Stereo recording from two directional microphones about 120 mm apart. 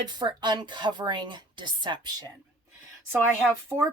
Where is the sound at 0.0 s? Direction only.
35° right (ahead or behind).